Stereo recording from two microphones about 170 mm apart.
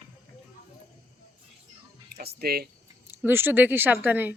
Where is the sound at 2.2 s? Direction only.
65° right (ahead or behind).